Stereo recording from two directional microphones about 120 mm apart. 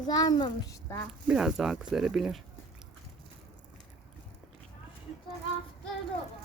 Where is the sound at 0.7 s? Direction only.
20° left (ahead or behind).